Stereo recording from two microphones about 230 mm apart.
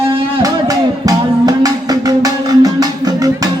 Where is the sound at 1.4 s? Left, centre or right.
Centre.